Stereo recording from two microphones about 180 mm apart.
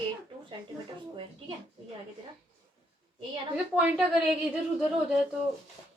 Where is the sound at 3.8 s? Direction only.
5° right (ahead or behind).